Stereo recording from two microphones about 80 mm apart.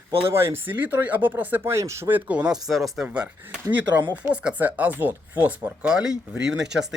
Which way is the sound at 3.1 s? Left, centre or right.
Centre.